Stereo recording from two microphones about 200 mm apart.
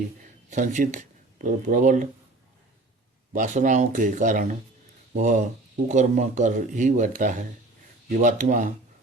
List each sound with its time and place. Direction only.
0.5 s speech: 40° right (ahead or behind)
3.3 s speech: 40° right (ahead or behind)